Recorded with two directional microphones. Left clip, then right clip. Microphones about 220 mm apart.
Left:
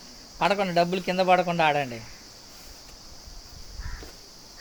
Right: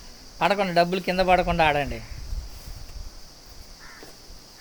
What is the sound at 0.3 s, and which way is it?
A man's voice, 15° right (ahead or behind).